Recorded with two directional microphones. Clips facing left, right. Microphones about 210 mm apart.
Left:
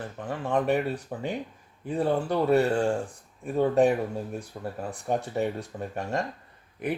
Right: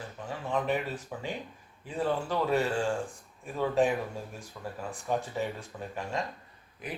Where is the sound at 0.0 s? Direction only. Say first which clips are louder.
Left 5 dB; 55° left (ahead or behind).